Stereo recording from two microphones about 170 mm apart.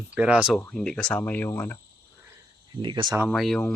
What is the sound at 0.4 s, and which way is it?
Speech, 5° left (ahead or behind).